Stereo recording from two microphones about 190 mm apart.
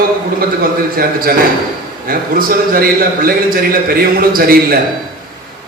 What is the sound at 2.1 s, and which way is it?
A man's voice, 50° right (ahead or behind).